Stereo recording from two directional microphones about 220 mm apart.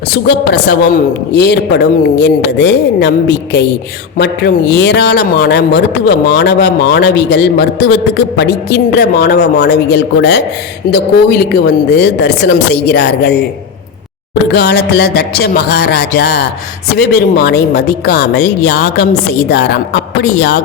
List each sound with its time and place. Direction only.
0.1 s a man's voice: 50° left (ahead or behind)
14.5 s a man's voice: 50° left (ahead or behind)